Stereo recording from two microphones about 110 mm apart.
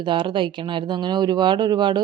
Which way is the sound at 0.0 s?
45° right (ahead or behind).